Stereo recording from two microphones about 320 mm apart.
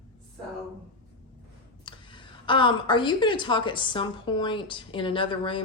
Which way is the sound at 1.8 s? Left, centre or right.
Centre.